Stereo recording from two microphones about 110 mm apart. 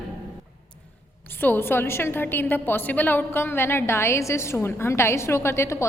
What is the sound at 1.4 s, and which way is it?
A woman's voice, 20° left (ahead or behind).